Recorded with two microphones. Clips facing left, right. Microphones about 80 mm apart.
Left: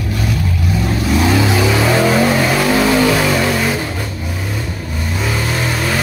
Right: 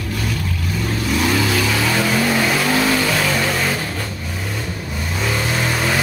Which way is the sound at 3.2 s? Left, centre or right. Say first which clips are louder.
Left 4 dB; centre.